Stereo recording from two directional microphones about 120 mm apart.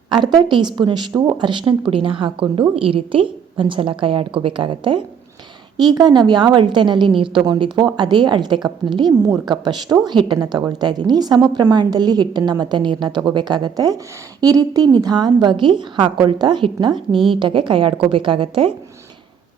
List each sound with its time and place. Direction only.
0.1 s a woman's voice: 40° right (ahead or behind)